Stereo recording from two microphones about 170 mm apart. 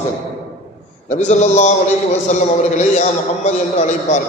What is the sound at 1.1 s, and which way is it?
A man's voice, 45° left (ahead or behind).